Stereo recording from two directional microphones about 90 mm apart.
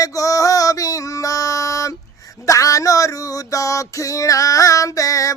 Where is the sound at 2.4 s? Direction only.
40° left (ahead or behind).